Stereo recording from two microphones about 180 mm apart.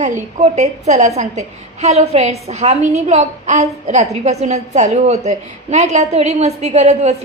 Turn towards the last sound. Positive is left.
turn(degrees=-40)  # may be behind; listen again after turning